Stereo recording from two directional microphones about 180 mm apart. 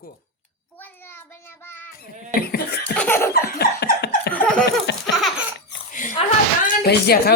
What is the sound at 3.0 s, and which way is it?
Laughter, 10° left (ahead or behind).